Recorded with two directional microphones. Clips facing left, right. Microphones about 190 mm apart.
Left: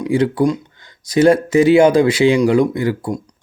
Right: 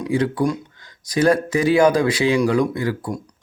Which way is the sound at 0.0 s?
30° left (ahead or behind).